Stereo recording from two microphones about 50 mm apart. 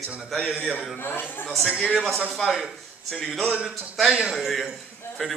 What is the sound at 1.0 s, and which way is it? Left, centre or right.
Speech, left.